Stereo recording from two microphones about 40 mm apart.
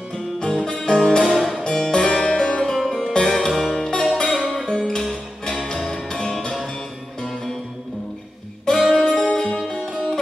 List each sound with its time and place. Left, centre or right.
0.1 s music: centre
1.2 s music: centre
1.6 s music: centre
6.0 s music: centre
8.7 s music: centre
9.3 s music: centre